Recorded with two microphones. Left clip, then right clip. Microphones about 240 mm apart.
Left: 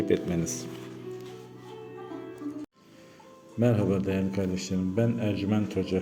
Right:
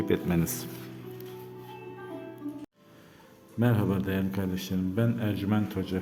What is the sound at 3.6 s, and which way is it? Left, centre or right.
A man's voice, centre.